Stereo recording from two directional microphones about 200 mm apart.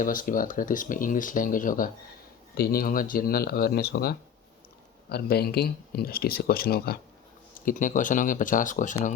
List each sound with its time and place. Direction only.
0.0 s speech: 40° left (ahead or behind)